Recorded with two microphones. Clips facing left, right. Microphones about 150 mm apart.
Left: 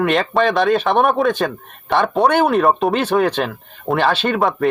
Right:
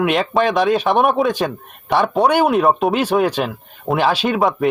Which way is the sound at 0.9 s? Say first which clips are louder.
Even; centre (ahead or behind).